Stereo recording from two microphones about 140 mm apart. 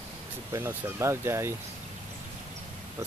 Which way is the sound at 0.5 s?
15° right (ahead or behind).